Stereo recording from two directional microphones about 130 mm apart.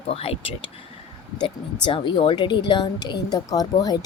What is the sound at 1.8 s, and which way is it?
Speech, 40° left (ahead or behind).